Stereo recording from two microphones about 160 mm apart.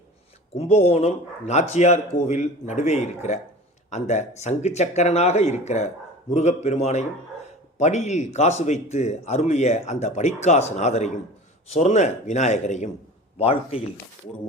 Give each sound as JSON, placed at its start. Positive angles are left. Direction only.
{"t": 0.5, "sound": "a man's voice", "side_deg": 40}